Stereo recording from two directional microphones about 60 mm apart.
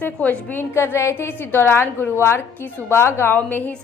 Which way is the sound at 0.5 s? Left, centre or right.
Left.